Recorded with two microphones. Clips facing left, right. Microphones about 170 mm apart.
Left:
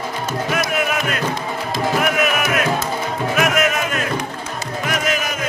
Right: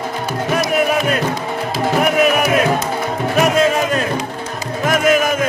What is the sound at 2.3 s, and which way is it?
Music, 35° right (ahead or behind).